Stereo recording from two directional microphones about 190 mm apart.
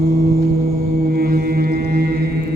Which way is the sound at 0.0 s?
55° right (ahead or behind).